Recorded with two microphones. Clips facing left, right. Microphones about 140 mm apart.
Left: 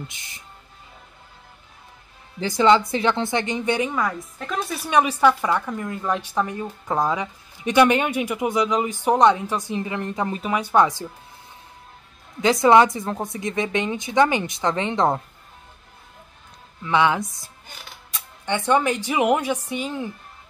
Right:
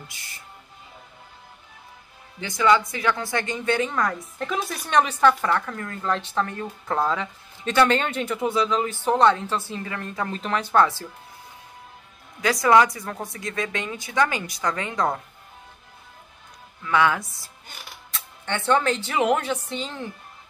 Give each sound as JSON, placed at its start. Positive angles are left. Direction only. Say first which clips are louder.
{"t": 0.1, "sound": "a woman's voice", "louder": "even", "side_deg": 20}
{"t": 2.4, "sound": "a woman's voice", "louder": "left 3 dB", "side_deg": 30}
{"t": 3.9, "sound": "a woman's voice", "louder": "left 1 dB", "side_deg": 5}
{"t": 12.4, "sound": "a woman's voice", "louder": "left 3 dB", "side_deg": 25}
{"t": 16.8, "sound": "a woman's voice", "louder": "left 2 dB", "side_deg": 20}